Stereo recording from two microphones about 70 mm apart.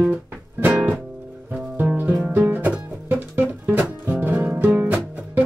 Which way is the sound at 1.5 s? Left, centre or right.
Right.